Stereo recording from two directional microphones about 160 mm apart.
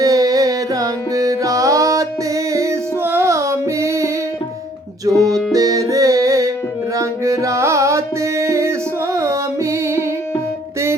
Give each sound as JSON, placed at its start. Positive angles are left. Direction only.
{"t": 0.0, "sound": "music", "side_deg": -20}